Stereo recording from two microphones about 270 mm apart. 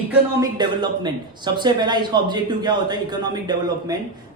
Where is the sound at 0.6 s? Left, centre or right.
Centre.